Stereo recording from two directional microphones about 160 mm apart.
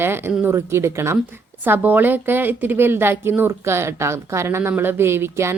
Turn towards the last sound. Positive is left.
turn(degrees=-15)  # may be behind; listen again after turning